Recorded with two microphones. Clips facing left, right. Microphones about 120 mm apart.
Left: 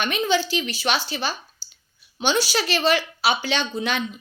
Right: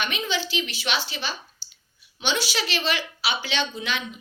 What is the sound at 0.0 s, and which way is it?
A woman's voice, 45° left (ahead or behind).